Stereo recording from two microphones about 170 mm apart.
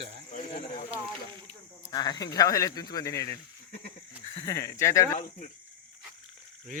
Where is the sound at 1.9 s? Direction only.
25° left (ahead or behind).